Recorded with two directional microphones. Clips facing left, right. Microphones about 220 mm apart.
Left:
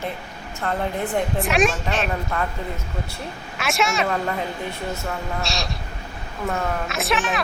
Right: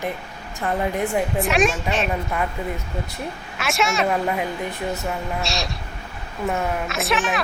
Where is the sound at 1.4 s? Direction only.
Centre (ahead or behind).